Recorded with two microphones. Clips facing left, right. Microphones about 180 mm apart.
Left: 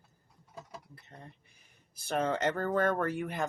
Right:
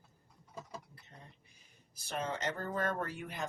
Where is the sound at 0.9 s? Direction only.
60° left (ahead or behind).